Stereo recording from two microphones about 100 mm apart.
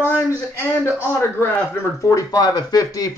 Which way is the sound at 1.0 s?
20° left (ahead or behind).